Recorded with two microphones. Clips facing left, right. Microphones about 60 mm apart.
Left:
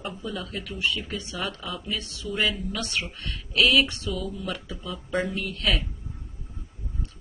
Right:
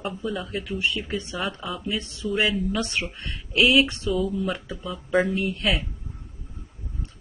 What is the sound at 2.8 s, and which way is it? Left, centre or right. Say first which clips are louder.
Speech: right 3 dB; right.